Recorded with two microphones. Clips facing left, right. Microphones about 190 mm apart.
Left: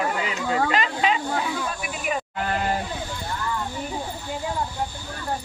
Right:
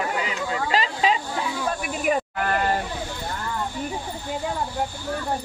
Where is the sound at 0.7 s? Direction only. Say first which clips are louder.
Right 1 dB; 30° right (ahead or behind).